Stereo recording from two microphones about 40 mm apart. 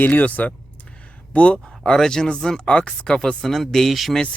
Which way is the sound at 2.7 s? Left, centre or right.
Left.